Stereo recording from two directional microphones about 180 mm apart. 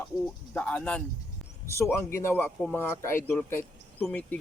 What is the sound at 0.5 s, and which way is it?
A man's voice, 10° left (ahead or behind).